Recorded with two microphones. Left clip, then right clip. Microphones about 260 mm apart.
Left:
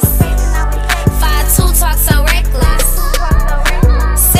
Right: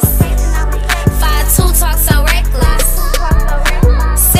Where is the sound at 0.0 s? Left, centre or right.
Centre.